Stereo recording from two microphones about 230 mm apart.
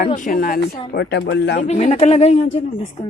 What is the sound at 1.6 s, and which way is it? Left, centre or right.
Speech, left.